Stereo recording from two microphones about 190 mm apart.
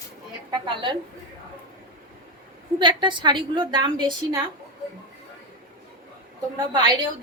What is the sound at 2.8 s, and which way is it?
A woman's voice, 25° right (ahead or behind).